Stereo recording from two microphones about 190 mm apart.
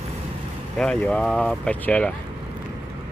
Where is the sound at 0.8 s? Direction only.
5° left (ahead or behind).